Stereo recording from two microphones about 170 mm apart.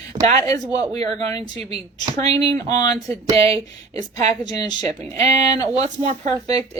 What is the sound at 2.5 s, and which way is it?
Speech, 25° left (ahead or behind).